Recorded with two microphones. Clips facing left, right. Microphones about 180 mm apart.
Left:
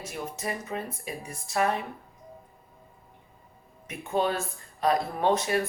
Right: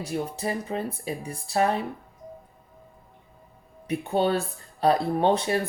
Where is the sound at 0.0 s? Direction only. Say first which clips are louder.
Right 6 dB; 30° right (ahead or behind).